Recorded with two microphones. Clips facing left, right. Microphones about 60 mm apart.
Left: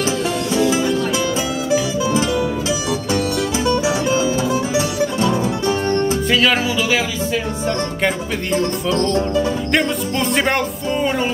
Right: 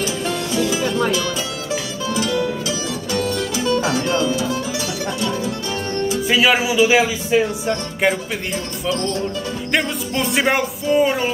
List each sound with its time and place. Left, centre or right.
0.5 s music: left
3.6 s music: centre
5.7 s music: left
6.2 s speech: centre
9.7 s music: centre